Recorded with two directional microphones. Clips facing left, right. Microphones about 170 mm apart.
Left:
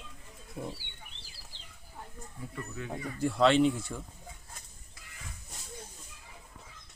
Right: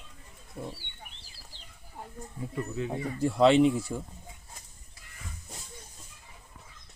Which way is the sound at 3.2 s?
5° right (ahead or behind).